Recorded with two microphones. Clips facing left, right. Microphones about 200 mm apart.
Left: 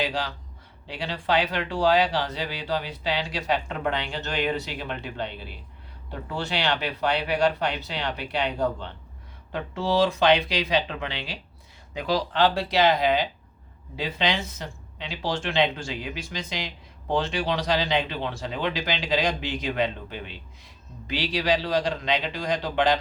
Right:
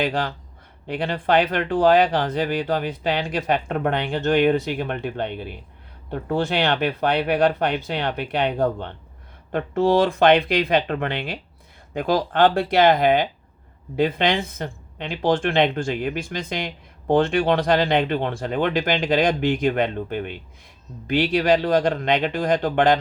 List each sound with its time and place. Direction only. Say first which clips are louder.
0.0 s speech: right 5 dB; 55° right (ahead or behind)